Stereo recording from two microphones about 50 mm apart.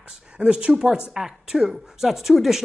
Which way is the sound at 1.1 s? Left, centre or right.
Centre.